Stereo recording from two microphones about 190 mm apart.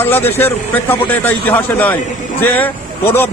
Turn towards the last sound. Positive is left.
turn(degrees=10)  # may be behind; listen again after turning